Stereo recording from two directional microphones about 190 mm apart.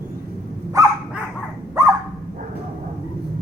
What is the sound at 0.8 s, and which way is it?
Dog, 15° right (ahead or behind).